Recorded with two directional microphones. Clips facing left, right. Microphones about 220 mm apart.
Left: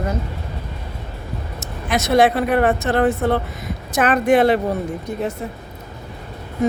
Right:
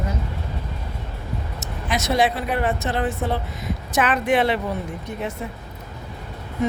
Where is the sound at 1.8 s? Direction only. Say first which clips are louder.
Left 5 dB; 55° left (ahead or behind).